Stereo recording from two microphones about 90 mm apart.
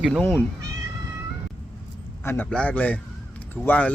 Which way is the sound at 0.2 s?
15° left (ahead or behind).